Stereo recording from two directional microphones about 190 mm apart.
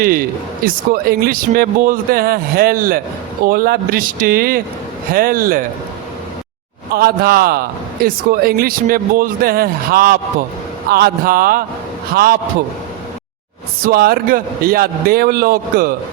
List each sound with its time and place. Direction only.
0.0 s a man's voice: 50° right (ahead or behind)
6.9 s a man's voice: 55° right (ahead or behind)
13.8 s a man's voice: 50° right (ahead or behind)